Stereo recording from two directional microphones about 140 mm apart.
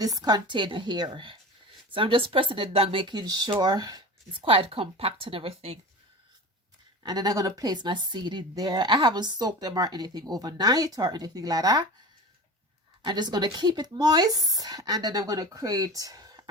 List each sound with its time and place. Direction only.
0.0 s speech: 25° right (ahead or behind); by 5.8 s 45° right (ahead or behind)
7.0 s a woman's voice: 30° right (ahead or behind)
13.0 s a woman's voice: 30° right (ahead or behind)